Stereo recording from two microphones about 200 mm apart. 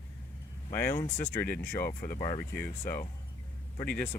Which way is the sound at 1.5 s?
50° left (ahead or behind).